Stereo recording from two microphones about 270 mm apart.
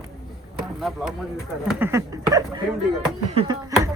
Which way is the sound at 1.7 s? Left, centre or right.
Centre.